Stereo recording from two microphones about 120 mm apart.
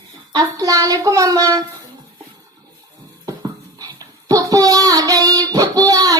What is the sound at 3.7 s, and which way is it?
Child singing, 30° right (ahead or behind).